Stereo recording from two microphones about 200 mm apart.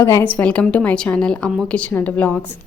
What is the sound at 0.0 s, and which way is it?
A woman's voice, 15° left (ahead or behind).